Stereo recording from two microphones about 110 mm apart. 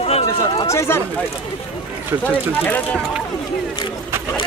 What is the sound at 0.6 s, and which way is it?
Speech, 25° left (ahead or behind).